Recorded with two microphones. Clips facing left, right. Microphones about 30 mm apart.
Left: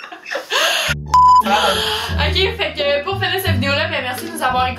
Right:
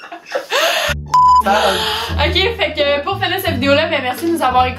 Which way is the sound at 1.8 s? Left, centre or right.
Centre.